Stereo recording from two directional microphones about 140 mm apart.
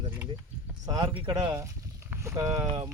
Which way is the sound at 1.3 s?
20° right (ahead or behind).